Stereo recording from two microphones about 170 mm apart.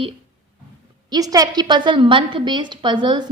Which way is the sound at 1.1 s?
20° right (ahead or behind).